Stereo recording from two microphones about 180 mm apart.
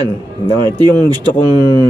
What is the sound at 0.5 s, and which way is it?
Speech, 25° right (ahead or behind).